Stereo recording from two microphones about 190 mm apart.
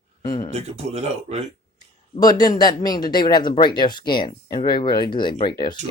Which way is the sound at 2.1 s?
20° left (ahead or behind).